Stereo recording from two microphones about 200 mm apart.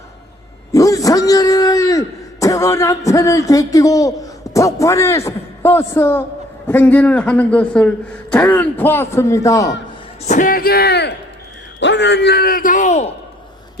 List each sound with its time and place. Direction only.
0.7 s a man's voice: 15° left (ahead or behind)
10.2 s a man's voice: 40° left (ahead or behind)